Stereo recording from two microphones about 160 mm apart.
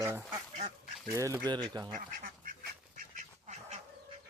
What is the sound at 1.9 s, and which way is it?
Duck, 60° right (ahead or behind).